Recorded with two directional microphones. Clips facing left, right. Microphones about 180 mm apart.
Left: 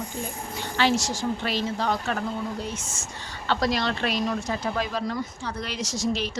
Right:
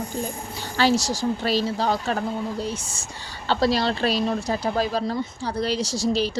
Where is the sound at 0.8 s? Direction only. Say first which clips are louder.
Right 3 dB; 35° right (ahead or behind).